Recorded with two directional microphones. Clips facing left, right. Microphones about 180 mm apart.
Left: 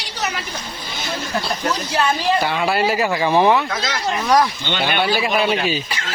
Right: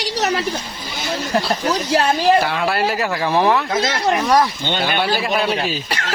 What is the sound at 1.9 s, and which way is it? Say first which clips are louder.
Speech: right 5 dB; 40° right (ahead or behind).